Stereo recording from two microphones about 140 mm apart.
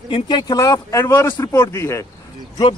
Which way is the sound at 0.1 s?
30° left (ahead or behind).